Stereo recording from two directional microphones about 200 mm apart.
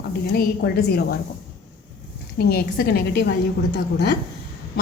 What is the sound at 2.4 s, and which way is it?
A woman's voice, 50° left (ahead or behind).